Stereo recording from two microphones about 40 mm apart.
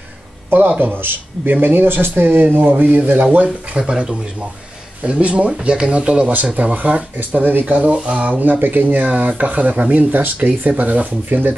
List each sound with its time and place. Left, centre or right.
0.5 s speech: right
2.5 s speech: right
3.7 s speech: right
7.2 s speech: right
7.6 s speech: right
8.4 s speech: right
10.2 s speech: right